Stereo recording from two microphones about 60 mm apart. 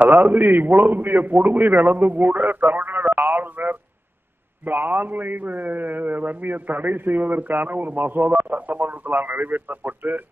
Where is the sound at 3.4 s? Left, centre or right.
Right.